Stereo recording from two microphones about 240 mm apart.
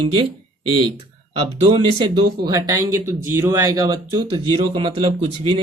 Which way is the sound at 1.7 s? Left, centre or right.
Centre.